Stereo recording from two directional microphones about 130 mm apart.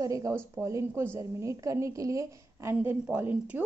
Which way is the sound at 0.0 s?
25° right (ahead or behind).